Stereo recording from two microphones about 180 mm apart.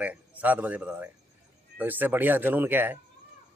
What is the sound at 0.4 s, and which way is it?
Speech, 10° right (ahead or behind).